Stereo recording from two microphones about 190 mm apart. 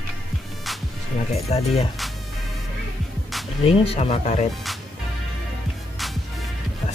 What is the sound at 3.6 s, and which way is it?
Speech, 30° left (ahead or behind).